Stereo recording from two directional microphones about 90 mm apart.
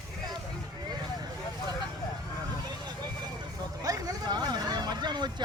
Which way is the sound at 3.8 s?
45° right (ahead or behind).